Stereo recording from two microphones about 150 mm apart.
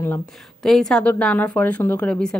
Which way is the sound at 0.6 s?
5° left (ahead or behind).